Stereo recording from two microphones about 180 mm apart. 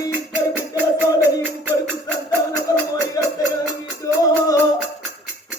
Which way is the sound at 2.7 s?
20° left (ahead or behind).